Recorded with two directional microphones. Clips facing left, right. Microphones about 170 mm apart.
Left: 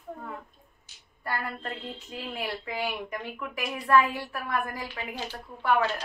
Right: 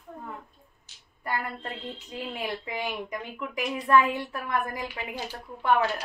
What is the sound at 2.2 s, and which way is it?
Speech, 20° right (ahead or behind).